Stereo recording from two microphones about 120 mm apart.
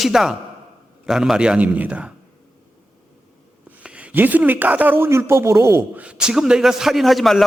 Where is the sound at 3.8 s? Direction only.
10° right (ahead or behind).